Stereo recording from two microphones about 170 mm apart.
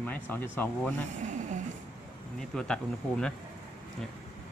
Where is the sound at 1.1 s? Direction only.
45° right (ahead or behind).